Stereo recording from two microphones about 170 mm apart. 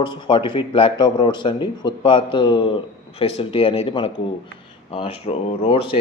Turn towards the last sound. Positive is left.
turn(degrees=30)  # may be behind; listen again after turning